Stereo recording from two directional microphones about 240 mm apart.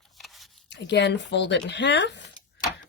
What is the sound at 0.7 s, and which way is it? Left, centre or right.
Speech, left.